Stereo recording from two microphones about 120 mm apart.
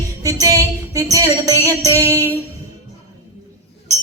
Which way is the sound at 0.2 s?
30° right (ahead or behind).